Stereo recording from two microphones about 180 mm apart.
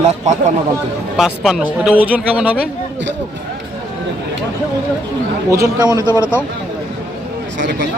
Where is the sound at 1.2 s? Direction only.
Centre (ahead or behind).